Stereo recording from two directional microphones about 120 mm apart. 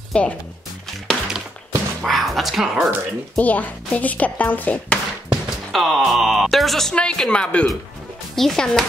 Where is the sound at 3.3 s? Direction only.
15° left (ahead or behind).